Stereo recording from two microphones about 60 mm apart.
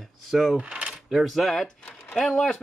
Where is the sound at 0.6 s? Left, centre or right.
Centre.